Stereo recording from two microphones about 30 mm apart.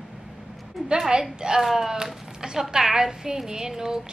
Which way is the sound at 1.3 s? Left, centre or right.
Right.